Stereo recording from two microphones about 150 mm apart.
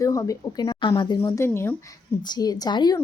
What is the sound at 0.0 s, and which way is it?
A woman's voice, 20° left (ahead or behind).